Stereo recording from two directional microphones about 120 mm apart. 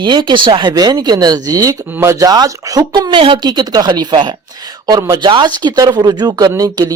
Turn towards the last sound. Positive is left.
turn(degrees=-30)  # may be behind; listen again after turning